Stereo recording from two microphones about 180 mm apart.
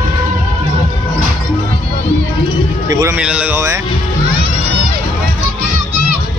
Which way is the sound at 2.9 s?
20° right (ahead or behind).